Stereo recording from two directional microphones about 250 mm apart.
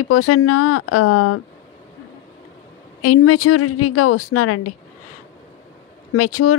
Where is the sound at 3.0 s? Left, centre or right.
Left.